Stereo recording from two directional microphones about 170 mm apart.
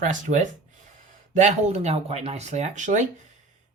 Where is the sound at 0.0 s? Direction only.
45° right (ahead or behind).